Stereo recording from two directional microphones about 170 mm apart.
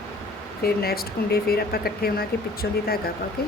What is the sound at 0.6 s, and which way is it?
Speech, 65° left (ahead or behind).